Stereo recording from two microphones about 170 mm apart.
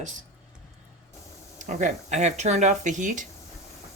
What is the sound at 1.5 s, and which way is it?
Speech, 45° right (ahead or behind).